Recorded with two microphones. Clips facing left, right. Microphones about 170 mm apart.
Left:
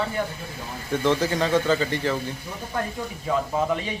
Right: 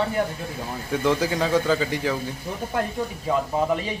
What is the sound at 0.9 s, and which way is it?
Speech, 10° right (ahead or behind).